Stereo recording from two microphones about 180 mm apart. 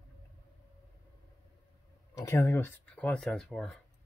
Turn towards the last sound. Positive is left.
turn(degrees=0)  # may be behind; listen again after turning